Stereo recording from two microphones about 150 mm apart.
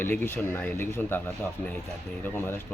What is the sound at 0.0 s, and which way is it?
Speech, 15° left (ahead or behind).